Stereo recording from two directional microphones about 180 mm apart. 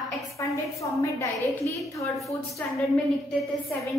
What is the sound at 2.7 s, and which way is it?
Speech, centre (ahead or behind).